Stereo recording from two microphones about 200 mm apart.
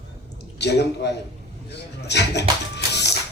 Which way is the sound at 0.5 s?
55° left (ahead or behind).